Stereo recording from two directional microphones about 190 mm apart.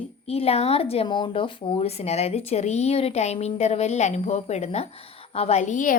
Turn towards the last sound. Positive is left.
turn(degrees=45)  # may be behind; listen again after turning